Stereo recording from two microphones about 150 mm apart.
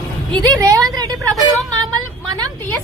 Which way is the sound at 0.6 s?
25° right (ahead or behind).